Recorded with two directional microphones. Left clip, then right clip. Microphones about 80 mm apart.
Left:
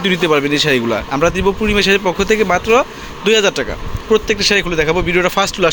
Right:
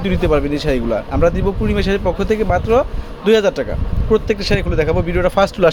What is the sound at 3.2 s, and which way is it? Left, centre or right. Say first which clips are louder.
Speech: left 1 dB; centre.